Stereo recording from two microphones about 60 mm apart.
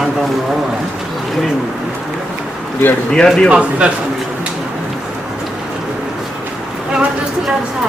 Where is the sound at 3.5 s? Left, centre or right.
Centre.